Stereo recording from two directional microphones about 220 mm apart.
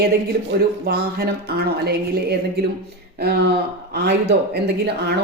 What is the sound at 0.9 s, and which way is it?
Speech, 45° right (ahead or behind).